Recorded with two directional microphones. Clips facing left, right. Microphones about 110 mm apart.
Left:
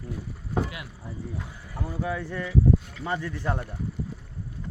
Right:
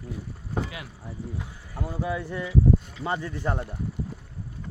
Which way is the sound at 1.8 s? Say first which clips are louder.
Right 1 dB; 15° right (ahead or behind).